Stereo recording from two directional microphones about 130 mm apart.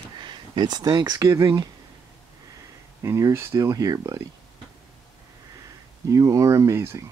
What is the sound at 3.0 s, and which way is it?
Speech, 20° right (ahead or behind).